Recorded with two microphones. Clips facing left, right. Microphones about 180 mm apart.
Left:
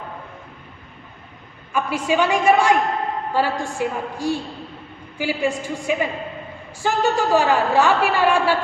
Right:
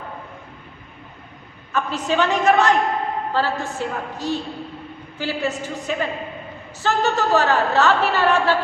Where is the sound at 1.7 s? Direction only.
10° left (ahead or behind).